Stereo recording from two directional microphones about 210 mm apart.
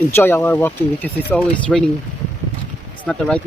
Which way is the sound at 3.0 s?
5° left (ahead or behind).